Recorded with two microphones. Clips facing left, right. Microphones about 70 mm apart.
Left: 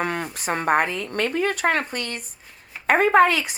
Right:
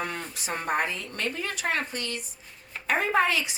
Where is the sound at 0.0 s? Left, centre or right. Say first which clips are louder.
Left 7 dB; left.